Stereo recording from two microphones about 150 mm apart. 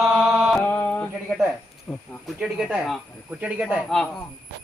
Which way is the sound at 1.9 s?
5° left (ahead or behind).